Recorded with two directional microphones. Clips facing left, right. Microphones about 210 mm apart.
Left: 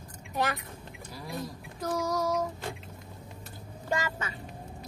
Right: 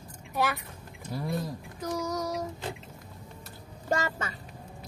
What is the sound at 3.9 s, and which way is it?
Speech, 40° right (ahead or behind).